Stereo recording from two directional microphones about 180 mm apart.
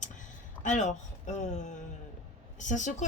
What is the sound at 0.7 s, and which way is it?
Speech, 45° left (ahead or behind).